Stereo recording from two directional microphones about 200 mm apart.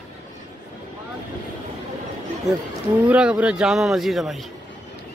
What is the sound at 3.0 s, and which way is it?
Speech, 5° right (ahead or behind).